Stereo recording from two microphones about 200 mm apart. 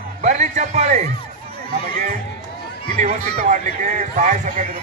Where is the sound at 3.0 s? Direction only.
35° right (ahead or behind).